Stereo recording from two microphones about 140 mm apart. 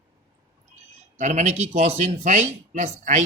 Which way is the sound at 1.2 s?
60° right (ahead or behind).